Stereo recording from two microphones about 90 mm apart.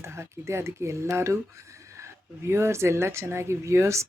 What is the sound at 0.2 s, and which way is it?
Speech, 30° right (ahead or behind).